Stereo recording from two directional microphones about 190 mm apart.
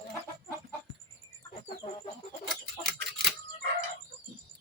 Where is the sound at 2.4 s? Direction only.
Centre (ahead or behind).